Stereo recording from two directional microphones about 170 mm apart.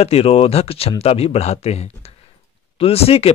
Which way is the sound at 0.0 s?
35° left (ahead or behind).